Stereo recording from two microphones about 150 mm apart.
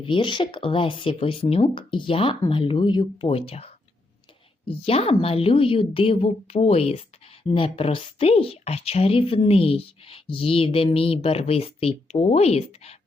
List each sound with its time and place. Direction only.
0.0 s a woman's voice: 35° left (ahead or behind)